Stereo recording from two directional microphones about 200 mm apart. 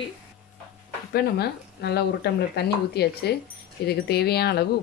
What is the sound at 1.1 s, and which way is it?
Speech, 55° left (ahead or behind).